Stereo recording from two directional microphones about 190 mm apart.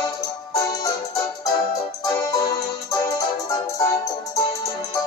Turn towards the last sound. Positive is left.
turn(degrees=15)  # may be behind; listen again after turning